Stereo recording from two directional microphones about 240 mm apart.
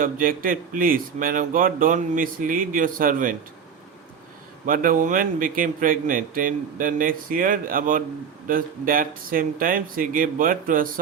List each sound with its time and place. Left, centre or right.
0.0 s speech: right
4.6 s speech: right